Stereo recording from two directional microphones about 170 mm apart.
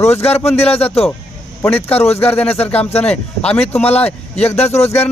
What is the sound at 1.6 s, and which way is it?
Speech, 10° left (ahead or behind).